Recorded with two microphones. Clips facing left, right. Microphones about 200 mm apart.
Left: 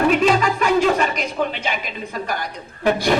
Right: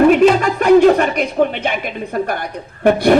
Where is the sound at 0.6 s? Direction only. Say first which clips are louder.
Right 12 dB; 60° right (ahead or behind).